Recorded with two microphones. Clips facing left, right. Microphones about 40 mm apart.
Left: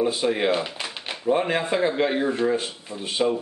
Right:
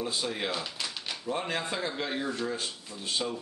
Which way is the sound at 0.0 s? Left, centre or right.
Left.